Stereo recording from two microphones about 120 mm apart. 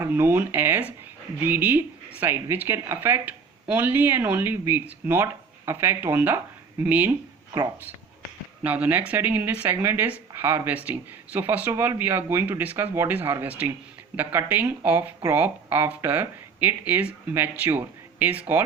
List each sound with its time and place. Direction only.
0.0 s a woman's voice: 20° right (ahead or behind)
8.6 s a woman's voice: 15° right (ahead or behind)